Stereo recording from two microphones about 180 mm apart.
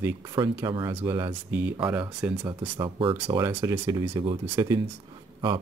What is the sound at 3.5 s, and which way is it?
Speech, 10° right (ahead or behind).